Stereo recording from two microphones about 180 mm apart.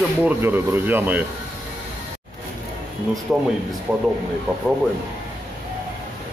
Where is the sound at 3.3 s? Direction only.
5° right (ahead or behind).